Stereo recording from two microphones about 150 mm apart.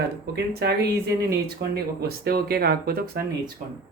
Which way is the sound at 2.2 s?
90° right.